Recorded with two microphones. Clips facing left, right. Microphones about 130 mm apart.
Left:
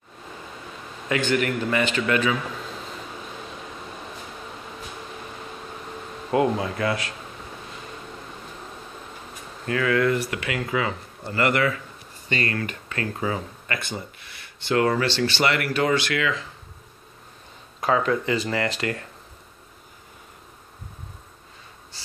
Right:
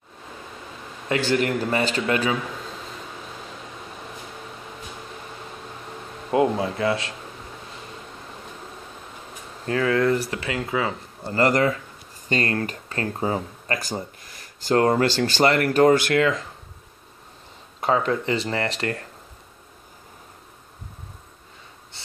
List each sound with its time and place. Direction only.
1.0 s speech: 35° right (ahead or behind)
6.3 s speech: 25° right (ahead or behind)
9.7 s speech: 30° right (ahead or behind)
17.7 s speech: 30° right (ahead or behind)